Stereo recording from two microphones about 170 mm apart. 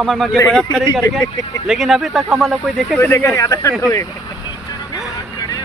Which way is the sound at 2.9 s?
10° left (ahead or behind).